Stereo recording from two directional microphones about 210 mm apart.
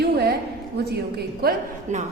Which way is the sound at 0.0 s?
50° right (ahead or behind).